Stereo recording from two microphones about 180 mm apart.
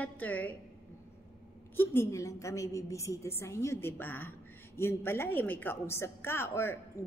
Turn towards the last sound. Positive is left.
turn(degrees=15)  # may be behind; listen again after turning